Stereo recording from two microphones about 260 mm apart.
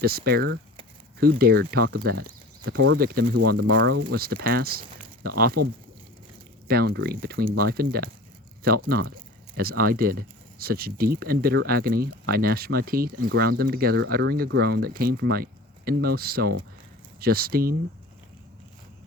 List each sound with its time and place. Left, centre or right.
0.0 s speech: right
2.7 s speech: right
3.0 s speech: right
3.3 s speech: right
3.7 s speech: right
6.7 s speech: right